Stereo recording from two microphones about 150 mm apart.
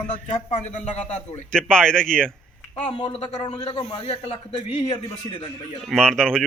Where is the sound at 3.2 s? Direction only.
40° left (ahead or behind).